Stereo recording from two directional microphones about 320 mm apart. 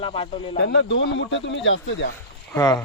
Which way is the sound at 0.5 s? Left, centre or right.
Left.